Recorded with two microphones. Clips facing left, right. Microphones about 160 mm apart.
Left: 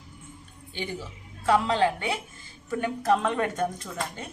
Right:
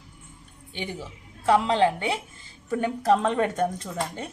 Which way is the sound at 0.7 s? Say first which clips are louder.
Even; 20° right (ahead or behind).